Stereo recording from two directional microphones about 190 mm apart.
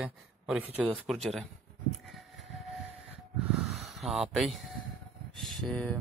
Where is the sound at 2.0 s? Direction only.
Centre (ahead or behind).